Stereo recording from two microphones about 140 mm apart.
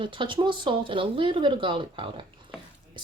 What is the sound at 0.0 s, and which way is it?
Speech, 35° right (ahead or behind).